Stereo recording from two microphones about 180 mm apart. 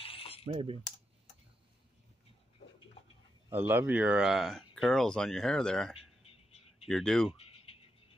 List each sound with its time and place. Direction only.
0.0 s mechanisms: 30° left (ahead or behind)
0.5 s speech: 30° right (ahead or behind)
3.4 s speech: 10° right (ahead or behind); by 5.9 s 5° left (ahead or behind)
5.9 s a sound: 35° left (ahead or behind)
6.9 s speech: centre (ahead or behind)
7.3 s a sound: 35° left (ahead or behind)